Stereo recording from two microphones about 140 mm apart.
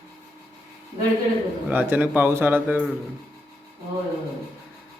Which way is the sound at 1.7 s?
10° right (ahead or behind).